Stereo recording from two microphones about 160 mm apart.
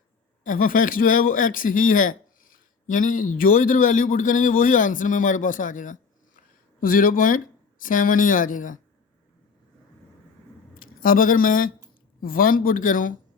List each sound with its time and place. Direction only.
0.4 s speech: 55° left (ahead or behind)
10.8 s speech: 60° left (ahead or behind)